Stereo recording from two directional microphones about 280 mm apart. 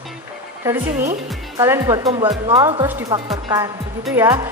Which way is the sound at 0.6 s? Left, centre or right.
Centre.